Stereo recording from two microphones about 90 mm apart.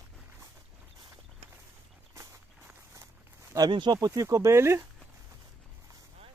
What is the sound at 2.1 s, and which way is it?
Walk, 35° right (ahead or behind).